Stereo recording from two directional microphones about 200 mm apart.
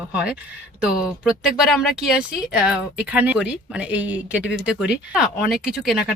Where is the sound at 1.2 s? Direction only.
Centre (ahead or behind).